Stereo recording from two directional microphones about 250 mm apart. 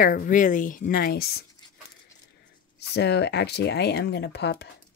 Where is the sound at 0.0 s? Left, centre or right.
Left.